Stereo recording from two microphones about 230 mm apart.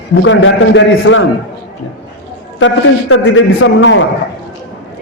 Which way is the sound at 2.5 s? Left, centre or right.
Left.